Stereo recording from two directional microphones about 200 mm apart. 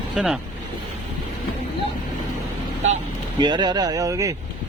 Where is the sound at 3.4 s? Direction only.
20° right (ahead or behind).